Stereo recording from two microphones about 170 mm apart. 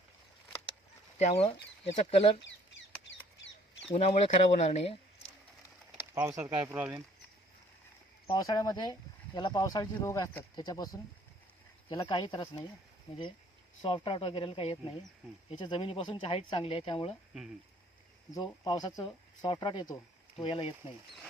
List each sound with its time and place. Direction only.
1.2 s speech: 35° left (ahead or behind)
3.9 s speech: 40° left (ahead or behind)
6.1 s speech: 15° right (ahead or behind)
8.3 s speech: 20° left (ahead or behind)
13.8 s speech: 30° left (ahead or behind)
18.3 s speech: 25° left (ahead or behind)